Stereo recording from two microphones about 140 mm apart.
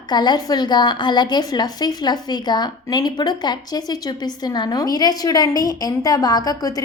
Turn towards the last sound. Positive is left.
turn(degrees=30)  # may be behind; listen again after turning